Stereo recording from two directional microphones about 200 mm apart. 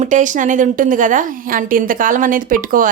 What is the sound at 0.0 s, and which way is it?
Speech, 40° right (ahead or behind).